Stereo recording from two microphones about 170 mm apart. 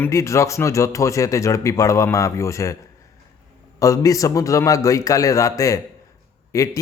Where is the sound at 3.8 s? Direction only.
20° left (ahead or behind).